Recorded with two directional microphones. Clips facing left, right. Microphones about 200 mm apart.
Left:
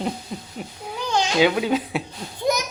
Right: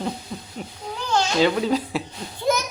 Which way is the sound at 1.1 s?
15° left (ahead or behind).